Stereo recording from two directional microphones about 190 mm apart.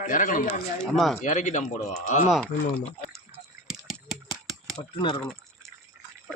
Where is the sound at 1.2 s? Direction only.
40° left (ahead or behind).